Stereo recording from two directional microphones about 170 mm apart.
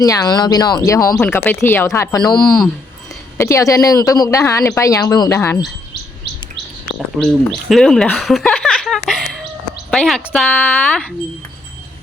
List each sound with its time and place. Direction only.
0.0 s speech: 20° left (ahead or behind)
7.2 s speech: 5° left (ahead or behind)
9.0 s a sound: centre (ahead or behind)
9.9 s speech: 5° left (ahead or behind)